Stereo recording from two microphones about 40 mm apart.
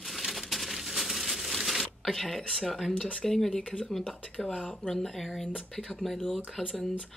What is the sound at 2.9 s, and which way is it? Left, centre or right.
Speech, left.